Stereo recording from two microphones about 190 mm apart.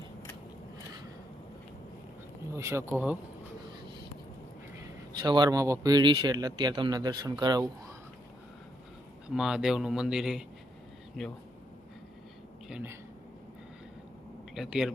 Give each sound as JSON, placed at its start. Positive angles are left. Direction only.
{"t": 2.6, "sound": "speech", "side_deg": -15}
{"t": 4.8, "sound": "a man's voice", "side_deg": -20}
{"t": 9.3, "sound": "speech", "side_deg": -5}
{"t": 12.6, "sound": "speech", "side_deg": -10}
{"t": 14.5, "sound": "speech", "side_deg": 0}